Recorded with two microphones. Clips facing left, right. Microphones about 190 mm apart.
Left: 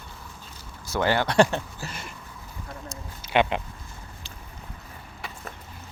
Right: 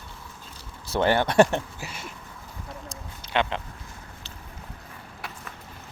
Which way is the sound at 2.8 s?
10° left (ahead or behind).